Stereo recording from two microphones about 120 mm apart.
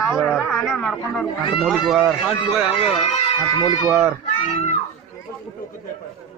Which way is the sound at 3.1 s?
55° left (ahead or behind).